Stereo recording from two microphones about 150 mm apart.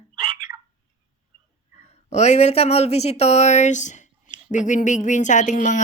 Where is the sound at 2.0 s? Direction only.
50° left (ahead or behind).